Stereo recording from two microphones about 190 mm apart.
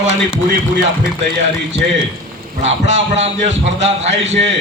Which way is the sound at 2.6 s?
35° right (ahead or behind).